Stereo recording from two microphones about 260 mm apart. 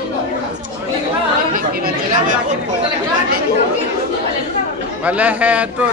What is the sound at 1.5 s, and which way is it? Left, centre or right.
Speech, right.